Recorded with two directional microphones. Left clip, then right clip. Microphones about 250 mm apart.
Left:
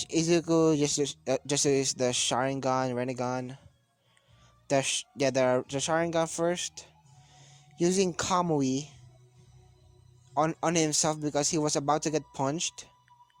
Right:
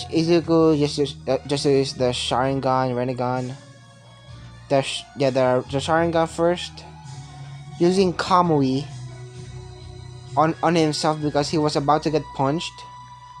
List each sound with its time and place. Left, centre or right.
0.0 s speech: left
4.7 s speech: left
10.3 s speech: left